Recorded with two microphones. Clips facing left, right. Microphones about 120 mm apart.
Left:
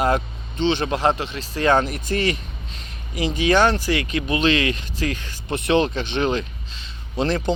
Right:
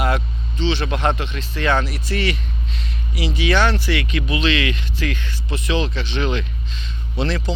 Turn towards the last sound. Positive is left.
turn(degrees=40)  # may be behind; listen again after turning